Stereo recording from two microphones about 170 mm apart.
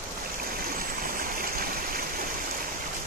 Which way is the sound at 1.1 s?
60° right (ahead or behind).